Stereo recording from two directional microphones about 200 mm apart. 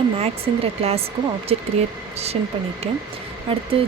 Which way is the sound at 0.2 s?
30° right (ahead or behind).